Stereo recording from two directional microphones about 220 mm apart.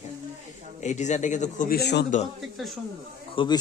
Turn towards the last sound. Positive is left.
turn(degrees=25)  # may be behind; listen again after turning